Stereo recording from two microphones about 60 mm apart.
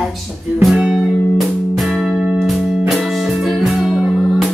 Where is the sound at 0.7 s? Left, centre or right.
Centre.